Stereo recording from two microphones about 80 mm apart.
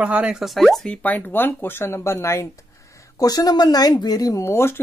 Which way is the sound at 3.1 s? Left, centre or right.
Left.